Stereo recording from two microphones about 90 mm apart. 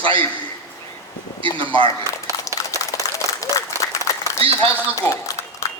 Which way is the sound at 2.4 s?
40° left (ahead or behind).